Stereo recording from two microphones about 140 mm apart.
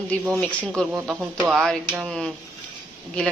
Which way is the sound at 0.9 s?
10° right (ahead or behind).